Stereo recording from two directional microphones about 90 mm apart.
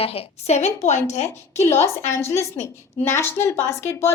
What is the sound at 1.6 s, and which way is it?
A woman's voice, 30° left (ahead or behind).